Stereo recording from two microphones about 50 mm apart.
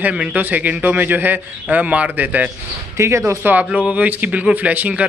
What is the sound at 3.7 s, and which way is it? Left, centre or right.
A man's voice, right.